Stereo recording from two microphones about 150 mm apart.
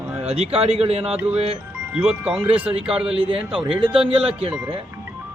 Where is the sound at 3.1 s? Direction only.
40° right (ahead or behind).